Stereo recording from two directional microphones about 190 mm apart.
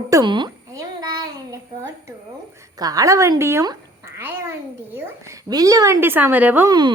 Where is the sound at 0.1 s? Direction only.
20° right (ahead or behind).